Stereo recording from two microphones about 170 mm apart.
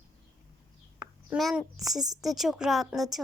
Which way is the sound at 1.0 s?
20° right (ahead or behind).